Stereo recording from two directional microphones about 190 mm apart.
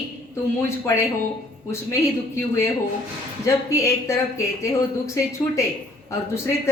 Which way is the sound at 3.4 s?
15° left (ahead or behind).